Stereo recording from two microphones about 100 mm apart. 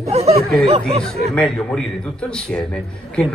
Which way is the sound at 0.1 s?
90° right.